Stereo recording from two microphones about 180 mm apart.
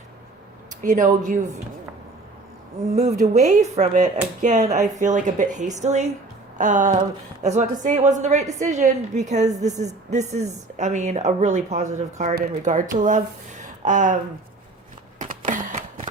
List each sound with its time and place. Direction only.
0.8 s speech: 45° right (ahead or behind)
2.9 s a woman's voice: 35° right (ahead or behind)
15.2 s a sound: 45° right (ahead or behind)